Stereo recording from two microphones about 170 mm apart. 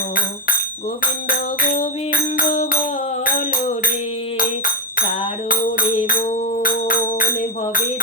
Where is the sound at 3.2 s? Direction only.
55° left (ahead or behind).